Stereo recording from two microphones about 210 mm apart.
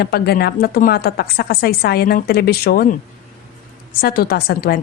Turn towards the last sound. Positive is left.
turn(degrees=45)  # may be behind; listen again after turning